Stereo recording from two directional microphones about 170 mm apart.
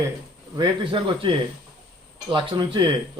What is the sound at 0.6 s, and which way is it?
A man's voice, 30° right (ahead or behind).